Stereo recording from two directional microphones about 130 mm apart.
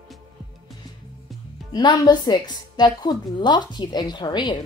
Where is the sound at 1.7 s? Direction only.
35° left (ahead or behind).